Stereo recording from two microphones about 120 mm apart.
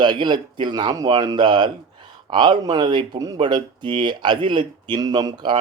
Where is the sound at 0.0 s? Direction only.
40° right (ahead or behind).